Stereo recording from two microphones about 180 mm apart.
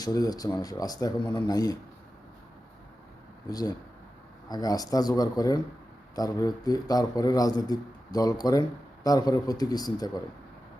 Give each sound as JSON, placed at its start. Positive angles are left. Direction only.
{"t": 0.0, "sound": "a man's voice", "side_deg": 20}
{"t": 3.5, "sound": "a man's voice", "side_deg": 20}